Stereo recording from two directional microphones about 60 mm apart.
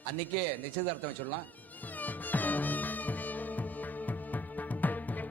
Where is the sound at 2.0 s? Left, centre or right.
Left.